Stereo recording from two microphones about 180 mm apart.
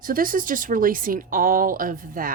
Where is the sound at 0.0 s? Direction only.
50° right (ahead or behind).